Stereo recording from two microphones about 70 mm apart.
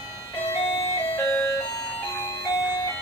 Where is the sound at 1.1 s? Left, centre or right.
Left.